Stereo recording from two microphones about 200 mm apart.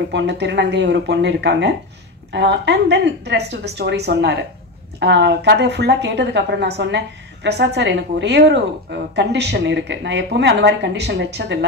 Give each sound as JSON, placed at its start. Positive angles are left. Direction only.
{"t": 0.1, "sound": "a woman's voice", "side_deg": -60}